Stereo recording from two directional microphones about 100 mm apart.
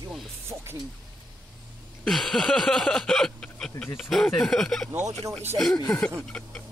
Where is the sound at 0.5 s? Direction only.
20° right (ahead or behind).